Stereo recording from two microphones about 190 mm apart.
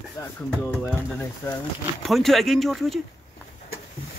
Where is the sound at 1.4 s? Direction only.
15° left (ahead or behind).